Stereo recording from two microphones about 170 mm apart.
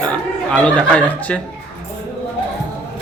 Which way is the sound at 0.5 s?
5° left (ahead or behind).